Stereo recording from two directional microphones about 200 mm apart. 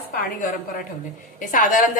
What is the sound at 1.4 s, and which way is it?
Speech, 40° left (ahead or behind).